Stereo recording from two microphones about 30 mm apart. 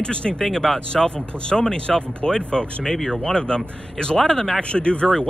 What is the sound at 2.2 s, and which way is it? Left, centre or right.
Speech, left.